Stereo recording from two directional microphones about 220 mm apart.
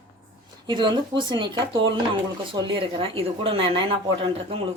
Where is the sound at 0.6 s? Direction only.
20° right (ahead or behind).